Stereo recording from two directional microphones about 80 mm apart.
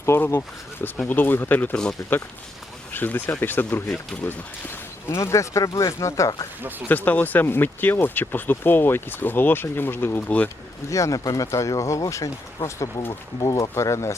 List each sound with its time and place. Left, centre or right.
0.0 s speech: left
1.7 s speech: centre
2.9 s speech: left
6.6 s speech: right
6.8 s speech: left
10.8 s speech: left